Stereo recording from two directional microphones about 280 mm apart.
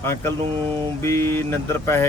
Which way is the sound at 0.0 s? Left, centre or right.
Centre.